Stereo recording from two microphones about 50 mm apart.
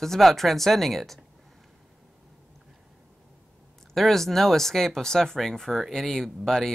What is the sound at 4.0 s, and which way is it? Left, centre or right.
Speech, centre.